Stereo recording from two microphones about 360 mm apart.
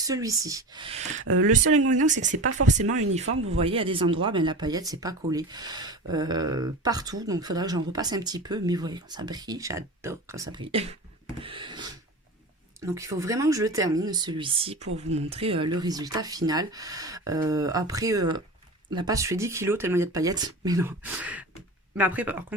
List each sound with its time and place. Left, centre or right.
0.0 s speech: centre
1.2 s speech: right
1.5 s speech: right
3.3 s speech: right
3.6 s speech: centre
11.3 s a sound: centre
12.8 s speech: centre